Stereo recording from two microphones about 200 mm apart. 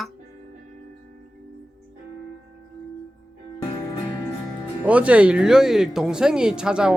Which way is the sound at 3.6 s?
20° left (ahead or behind).